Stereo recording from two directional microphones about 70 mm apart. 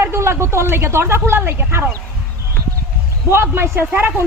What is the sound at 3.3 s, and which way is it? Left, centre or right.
Speech, right.